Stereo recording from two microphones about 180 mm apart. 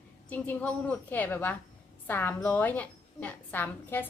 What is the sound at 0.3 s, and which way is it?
A woman's voice, 10° left (ahead or behind).